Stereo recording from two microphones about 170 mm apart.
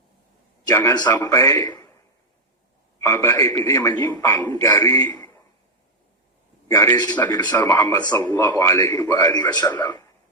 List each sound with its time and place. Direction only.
0.6 s a man's voice: 15° left (ahead or behind)
3.0 s a man's voice: 15° left (ahead or behind)
6.7 s a man's voice: 20° left (ahead or behind)
7.5 s a man's voice: 15° left (ahead or behind)
9.5 s a man's voice: 25° left (ahead or behind)